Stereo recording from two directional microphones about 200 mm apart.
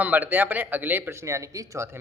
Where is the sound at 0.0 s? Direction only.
10° right (ahead or behind).